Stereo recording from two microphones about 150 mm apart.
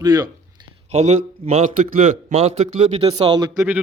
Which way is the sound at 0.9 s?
50° right (ahead or behind).